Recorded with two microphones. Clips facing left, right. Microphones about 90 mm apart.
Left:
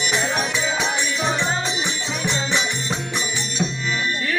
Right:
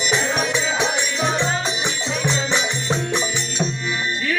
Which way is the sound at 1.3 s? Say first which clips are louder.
Right 1 dB; 20° left (ahead or behind).